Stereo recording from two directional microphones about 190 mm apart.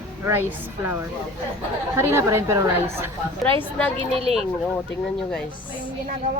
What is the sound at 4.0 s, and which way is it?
Speech, 30° right (ahead or behind).